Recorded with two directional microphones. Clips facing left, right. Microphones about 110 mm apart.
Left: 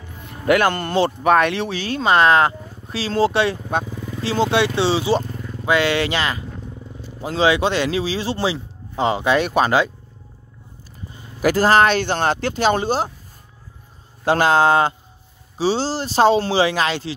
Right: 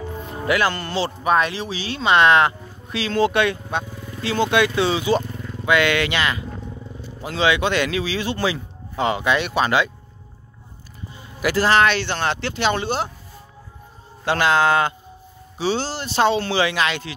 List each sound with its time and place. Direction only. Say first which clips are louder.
0.5 s speech: left 4 dB; 50° left (ahead or behind)
11.4 s speech: left 3 dB; 40° left (ahead or behind)
14.2 s speech: left 3 dB; 40° left (ahead or behind)